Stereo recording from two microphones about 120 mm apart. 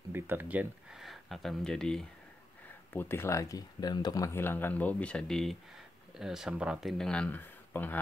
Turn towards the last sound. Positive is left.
turn(degrees=15)  # may be behind; listen again after turning